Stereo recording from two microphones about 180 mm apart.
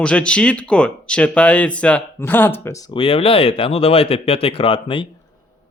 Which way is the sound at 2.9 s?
30° left (ahead or behind).